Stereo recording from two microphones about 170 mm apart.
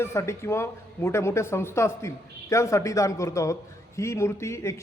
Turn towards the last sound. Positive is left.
turn(degrees=15)  # may be behind; listen again after turning